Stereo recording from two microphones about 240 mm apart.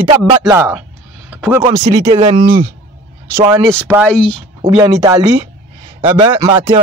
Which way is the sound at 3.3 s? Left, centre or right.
Centre.